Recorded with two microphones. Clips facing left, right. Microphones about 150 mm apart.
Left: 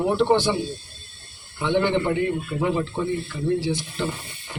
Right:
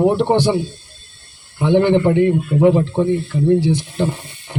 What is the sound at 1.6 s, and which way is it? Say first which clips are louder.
Speech: right 8 dB; 50° right (ahead or behind).